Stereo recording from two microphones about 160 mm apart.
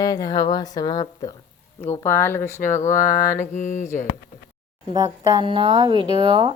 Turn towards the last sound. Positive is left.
turn(degrees=-30)  # may be behind; listen again after turning